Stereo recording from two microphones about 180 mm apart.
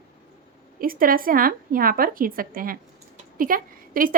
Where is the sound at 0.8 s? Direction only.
50° right (ahead or behind).